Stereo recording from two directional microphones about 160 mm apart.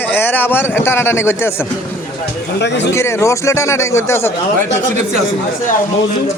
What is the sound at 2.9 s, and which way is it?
Speech, 15° left (ahead or behind).